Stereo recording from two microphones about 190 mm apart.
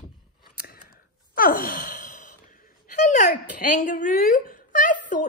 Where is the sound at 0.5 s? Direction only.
55° left (ahead or behind).